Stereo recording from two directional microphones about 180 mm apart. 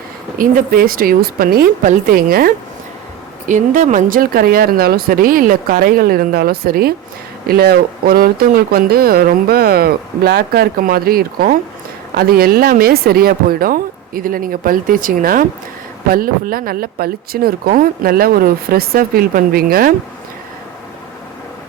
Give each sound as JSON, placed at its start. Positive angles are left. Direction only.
{"t": 0.3, "sound": "speech", "side_deg": -55}
{"t": 3.5, "sound": "speech", "side_deg": -45}